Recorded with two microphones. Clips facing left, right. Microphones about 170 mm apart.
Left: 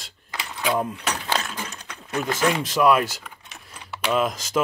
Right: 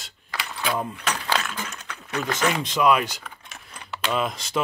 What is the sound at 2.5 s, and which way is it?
Speech, centre (ahead or behind).